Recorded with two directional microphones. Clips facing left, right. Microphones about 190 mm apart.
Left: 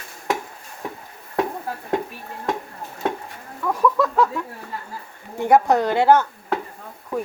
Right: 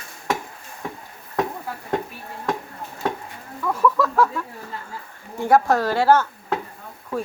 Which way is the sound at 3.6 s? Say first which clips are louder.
Left 1 dB; 15° left (ahead or behind).